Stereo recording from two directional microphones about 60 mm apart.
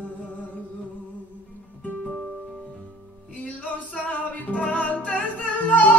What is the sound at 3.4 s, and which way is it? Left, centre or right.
Music, left.